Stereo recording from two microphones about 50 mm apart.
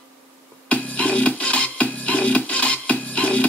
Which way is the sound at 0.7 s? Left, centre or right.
Left.